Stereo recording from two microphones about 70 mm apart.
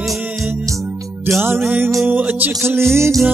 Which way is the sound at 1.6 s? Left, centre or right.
Right.